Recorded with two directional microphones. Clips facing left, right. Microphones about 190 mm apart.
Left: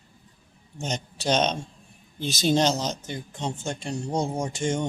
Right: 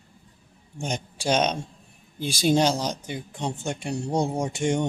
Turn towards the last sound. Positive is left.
turn(degrees=-20)  # may be behind; listen again after turning